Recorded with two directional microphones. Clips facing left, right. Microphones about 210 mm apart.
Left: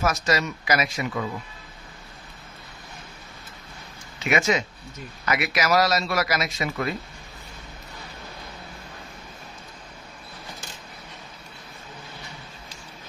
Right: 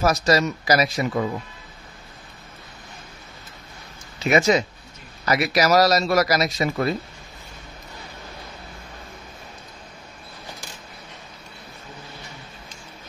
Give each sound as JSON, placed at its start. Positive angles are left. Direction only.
{"t": 0.0, "sound": "a man's voice", "side_deg": -35}
{"t": 4.2, "sound": "a man's voice", "side_deg": -35}